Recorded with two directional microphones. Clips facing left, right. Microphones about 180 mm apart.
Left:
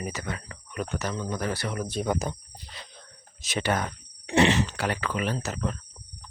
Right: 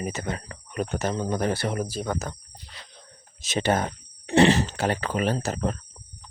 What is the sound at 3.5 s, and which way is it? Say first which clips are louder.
Speech: right 3 dB; 25° right (ahead or behind).